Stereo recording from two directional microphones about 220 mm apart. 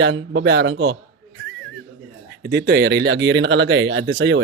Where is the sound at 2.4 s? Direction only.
50° right (ahead or behind).